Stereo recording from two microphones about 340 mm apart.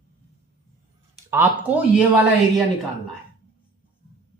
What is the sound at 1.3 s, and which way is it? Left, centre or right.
Speech, centre.